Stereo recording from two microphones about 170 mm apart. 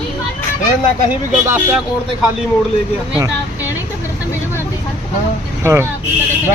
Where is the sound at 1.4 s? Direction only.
15° right (ahead or behind).